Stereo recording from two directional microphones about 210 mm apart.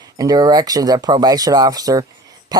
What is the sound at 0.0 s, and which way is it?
Speech, 15° right (ahead or behind).